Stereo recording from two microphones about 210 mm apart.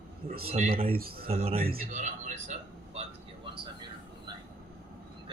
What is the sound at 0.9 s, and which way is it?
Speech, 45° right (ahead or behind).